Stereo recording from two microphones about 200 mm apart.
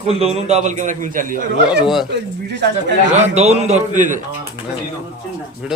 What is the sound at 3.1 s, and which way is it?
A man's voice, 35° right (ahead or behind).